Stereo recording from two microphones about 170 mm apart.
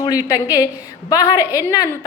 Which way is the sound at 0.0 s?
20° left (ahead or behind).